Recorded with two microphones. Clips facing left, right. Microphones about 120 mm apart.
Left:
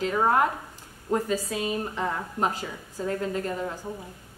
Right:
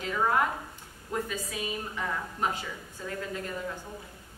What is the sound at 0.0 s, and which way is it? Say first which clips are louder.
Speech: left 4 dB; 40° left (ahead or behind).